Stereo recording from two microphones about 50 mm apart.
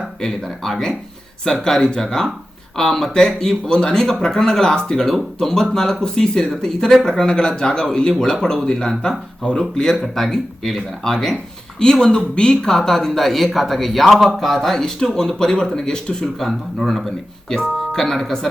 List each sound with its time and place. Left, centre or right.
0.2 s speech: centre
16.5 s speech: centre